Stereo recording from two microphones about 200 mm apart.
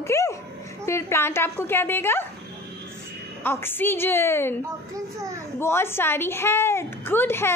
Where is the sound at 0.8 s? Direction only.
15° left (ahead or behind).